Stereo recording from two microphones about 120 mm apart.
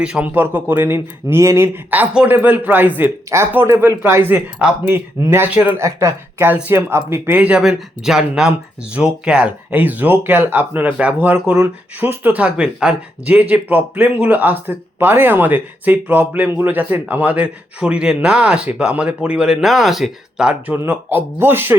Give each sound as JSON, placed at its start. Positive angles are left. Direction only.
{"t": 0.0, "sound": "speech", "side_deg": -10}